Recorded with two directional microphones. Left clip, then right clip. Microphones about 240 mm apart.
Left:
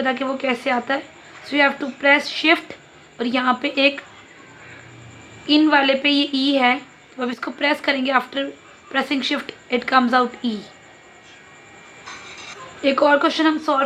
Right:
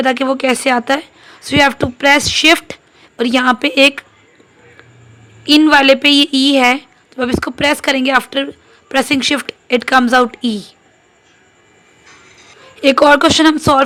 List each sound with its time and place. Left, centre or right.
0.0 s a woman's voice: right
5.5 s a woman's voice: right
12.8 s a woman's voice: right